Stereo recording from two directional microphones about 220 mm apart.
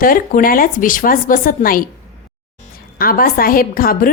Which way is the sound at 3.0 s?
40° left (ahead or behind).